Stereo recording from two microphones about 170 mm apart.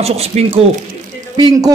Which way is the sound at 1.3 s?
25° right (ahead or behind).